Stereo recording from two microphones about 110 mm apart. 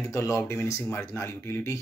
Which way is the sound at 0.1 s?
25° left (ahead or behind).